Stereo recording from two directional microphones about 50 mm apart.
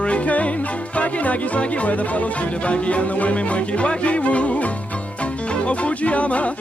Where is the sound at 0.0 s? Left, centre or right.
Left.